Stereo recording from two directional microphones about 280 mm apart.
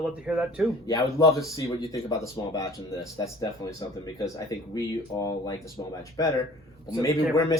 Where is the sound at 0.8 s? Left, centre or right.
Centre.